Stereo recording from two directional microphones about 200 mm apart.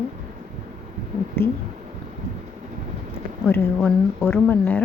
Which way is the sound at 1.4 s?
10° left (ahead or behind).